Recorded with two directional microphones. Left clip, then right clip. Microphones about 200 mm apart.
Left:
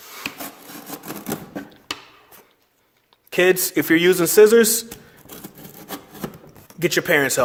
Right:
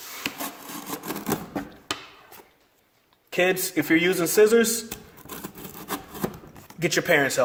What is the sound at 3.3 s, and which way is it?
Speech, 40° left (ahead or behind).